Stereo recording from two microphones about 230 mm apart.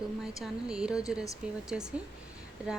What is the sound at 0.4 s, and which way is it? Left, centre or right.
Speech, centre.